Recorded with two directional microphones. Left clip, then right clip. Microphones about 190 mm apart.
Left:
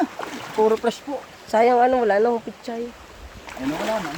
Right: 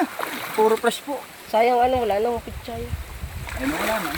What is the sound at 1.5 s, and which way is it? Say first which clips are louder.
Speech: left 2 dB; 25° left (ahead or behind).